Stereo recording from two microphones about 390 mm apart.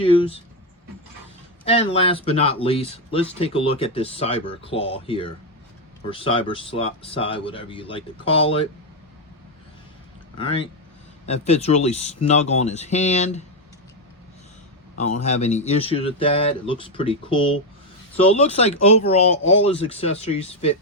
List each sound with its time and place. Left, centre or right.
0.0 s speech: centre
1.6 s speech: centre
10.3 s speech: centre
15.2 s speech: centre